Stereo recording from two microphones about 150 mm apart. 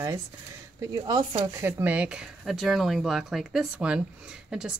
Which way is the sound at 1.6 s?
15° right (ahead or behind).